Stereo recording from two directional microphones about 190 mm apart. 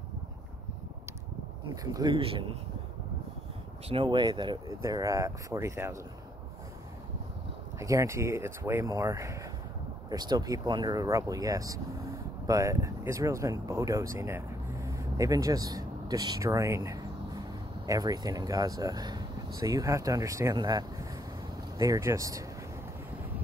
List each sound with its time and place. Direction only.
2.0 s speech: 25° right (ahead or behind)
3.9 s speech: 25° right (ahead or behind)
7.8 s speech: 15° right (ahead or behind)